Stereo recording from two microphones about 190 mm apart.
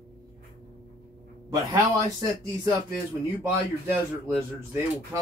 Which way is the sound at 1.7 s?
15° right (ahead or behind).